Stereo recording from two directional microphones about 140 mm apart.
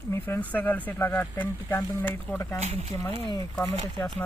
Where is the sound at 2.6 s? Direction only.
50° right (ahead or behind).